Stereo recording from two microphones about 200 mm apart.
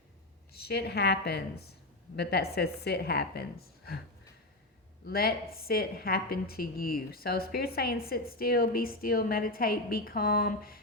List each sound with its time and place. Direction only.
0.5 s a woman's voice: 55° left (ahead or behind)
5.0 s a woman's voice: 50° left (ahead or behind)